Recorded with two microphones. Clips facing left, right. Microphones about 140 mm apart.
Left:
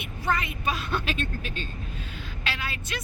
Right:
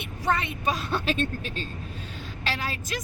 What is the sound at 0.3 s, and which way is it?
Speech, 30° right (ahead or behind).